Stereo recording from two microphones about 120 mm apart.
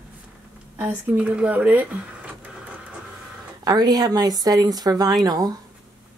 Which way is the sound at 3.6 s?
30° right (ahead or behind).